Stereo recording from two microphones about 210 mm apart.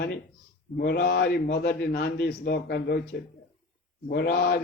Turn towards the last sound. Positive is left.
turn(degrees=45)  # may be behind; listen again after turning